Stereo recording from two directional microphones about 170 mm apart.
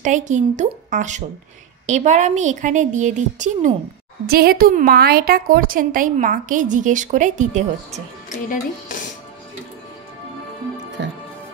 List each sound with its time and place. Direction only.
0.0 s a woman's voice: 45° right (ahead or behind)
4.3 s a woman's voice: 65° right (ahead or behind); by 8.0 s 45° right (ahead or behind)
8.3 s speech: 50° left (ahead or behind)